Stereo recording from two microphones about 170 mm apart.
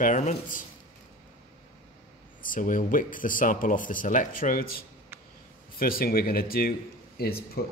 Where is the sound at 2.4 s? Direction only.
50° left (ahead or behind).